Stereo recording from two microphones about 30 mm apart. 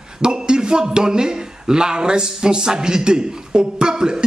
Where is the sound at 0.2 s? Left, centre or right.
Right.